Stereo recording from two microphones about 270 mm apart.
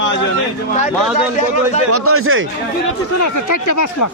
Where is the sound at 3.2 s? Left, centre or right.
Left.